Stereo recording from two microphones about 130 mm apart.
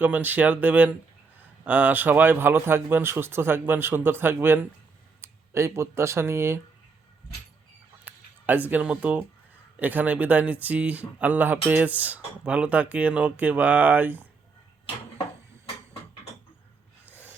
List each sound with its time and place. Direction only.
0.0 s speech: 15° right (ahead or behind)
8.0 s a sound: 10° right (ahead or behind)
8.7 s speech: 10° right (ahead or behind)